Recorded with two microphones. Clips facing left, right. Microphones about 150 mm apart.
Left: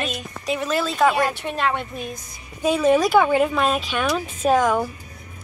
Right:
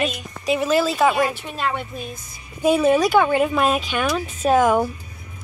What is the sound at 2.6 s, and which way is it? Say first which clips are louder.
Speech: right 1 dB; 10° right (ahead or behind).